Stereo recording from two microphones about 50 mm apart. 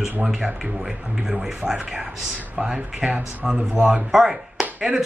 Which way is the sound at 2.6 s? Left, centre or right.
Centre.